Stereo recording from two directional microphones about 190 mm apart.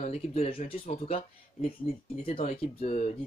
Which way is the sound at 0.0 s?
35° left (ahead or behind).